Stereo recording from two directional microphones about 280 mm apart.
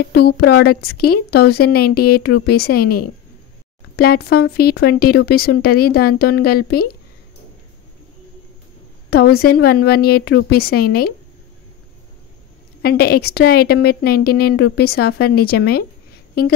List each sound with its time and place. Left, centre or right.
0.1 s speech: left
3.9 s speech: left
9.1 s speech: left
12.8 s speech: left